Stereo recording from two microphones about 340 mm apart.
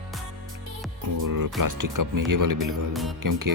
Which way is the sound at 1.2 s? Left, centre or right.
Right.